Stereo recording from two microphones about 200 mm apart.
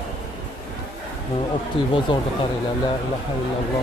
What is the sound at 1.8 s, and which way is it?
Speech, 25° left (ahead or behind).